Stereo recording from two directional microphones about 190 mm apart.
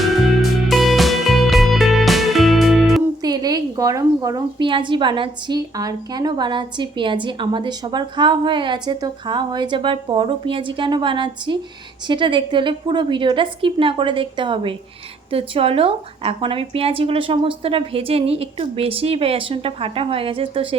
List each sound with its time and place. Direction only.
0.7 s music: centre (ahead or behind)
3.2 s a woman's voice: 20° right (ahead or behind)